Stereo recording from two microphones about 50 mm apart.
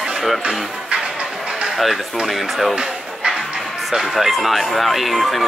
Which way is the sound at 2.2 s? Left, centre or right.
Centre.